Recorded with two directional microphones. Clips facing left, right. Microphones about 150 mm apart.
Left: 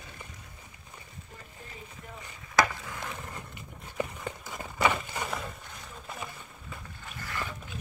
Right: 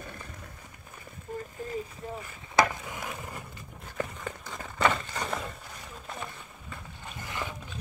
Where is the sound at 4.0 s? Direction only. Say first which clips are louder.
Left 1 dB; 10° left (ahead or behind).